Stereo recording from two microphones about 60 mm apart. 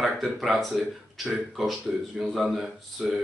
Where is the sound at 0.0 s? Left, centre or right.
Centre.